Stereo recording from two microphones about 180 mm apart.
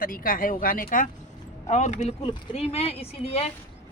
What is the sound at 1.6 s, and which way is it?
Speech, 40° left (ahead or behind).